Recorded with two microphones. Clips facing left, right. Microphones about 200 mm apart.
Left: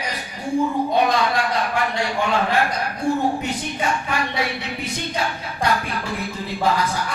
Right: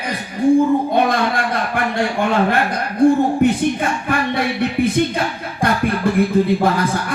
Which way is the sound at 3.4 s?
55° right (ahead or behind).